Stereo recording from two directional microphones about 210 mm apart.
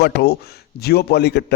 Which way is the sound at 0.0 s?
50° left (ahead or behind).